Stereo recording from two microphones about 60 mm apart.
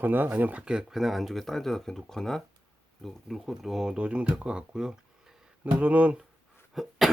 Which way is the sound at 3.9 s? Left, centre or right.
Centre.